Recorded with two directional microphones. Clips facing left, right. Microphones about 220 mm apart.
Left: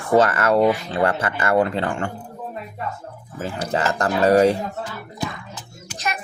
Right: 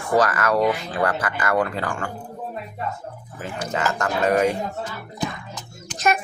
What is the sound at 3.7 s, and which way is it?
Speech, 35° left (ahead or behind).